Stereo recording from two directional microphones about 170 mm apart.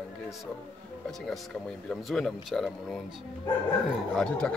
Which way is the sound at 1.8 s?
Centre (ahead or behind).